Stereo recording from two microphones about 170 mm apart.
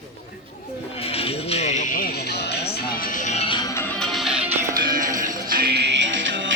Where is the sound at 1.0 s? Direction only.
35° left (ahead or behind); by 2.7 s 75° left (ahead or behind).